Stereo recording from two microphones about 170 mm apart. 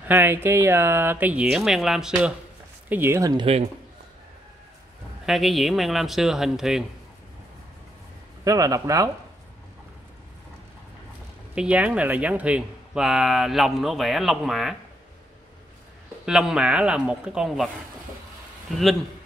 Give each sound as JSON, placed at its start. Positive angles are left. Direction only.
{"t": 0.1, "sound": "speech", "side_deg": -15}
{"t": 2.9, "sound": "speech", "side_deg": -15}
{"t": 5.2, "sound": "speech", "side_deg": 0}
{"t": 8.5, "sound": "speech", "side_deg": -20}
{"t": 11.5, "sound": "speech", "side_deg": -5}
{"t": 16.3, "sound": "speech", "side_deg": -5}